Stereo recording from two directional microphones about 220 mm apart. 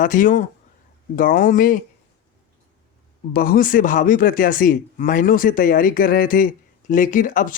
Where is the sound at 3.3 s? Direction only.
40° left (ahead or behind).